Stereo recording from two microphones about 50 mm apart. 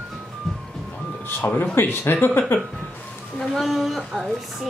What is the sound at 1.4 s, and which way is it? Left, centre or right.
Speech, left.